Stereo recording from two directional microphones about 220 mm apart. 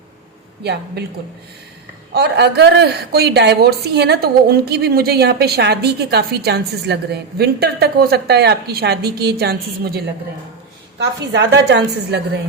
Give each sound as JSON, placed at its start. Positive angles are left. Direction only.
{"t": 0.6, "sound": "speech", "side_deg": -50}
{"t": 2.1, "sound": "speech", "side_deg": -50}